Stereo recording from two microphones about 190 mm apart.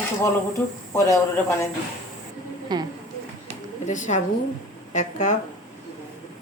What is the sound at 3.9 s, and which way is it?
A woman's voice, 40° left (ahead or behind).